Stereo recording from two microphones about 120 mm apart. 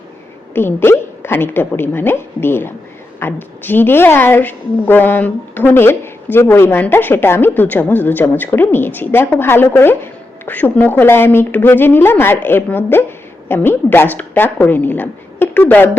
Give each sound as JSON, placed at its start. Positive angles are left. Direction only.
{"t": 0.5, "sound": "a woman's voice", "side_deg": 20}